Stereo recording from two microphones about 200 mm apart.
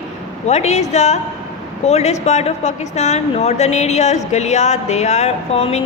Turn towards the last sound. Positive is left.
turn(degrees=30)  # may be behind; listen again after turning